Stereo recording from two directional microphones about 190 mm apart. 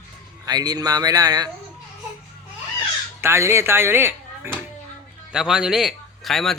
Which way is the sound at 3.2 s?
15° right (ahead or behind).